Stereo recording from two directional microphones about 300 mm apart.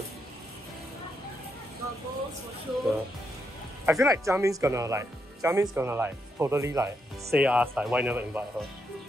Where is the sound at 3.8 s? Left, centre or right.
Centre.